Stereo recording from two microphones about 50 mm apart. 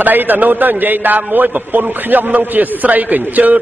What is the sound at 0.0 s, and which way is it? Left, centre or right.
A man's voice, right.